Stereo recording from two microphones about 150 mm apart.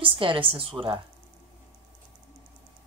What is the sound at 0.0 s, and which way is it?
A woman's voice, 35° right (ahead or behind).